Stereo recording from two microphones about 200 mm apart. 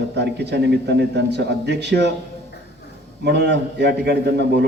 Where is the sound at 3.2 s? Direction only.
60° right (ahead or behind).